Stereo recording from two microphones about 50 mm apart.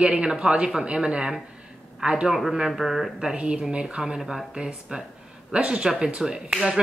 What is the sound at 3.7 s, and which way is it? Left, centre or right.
Speech, centre.